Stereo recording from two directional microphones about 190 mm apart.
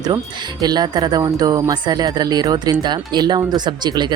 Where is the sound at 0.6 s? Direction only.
20° right (ahead or behind).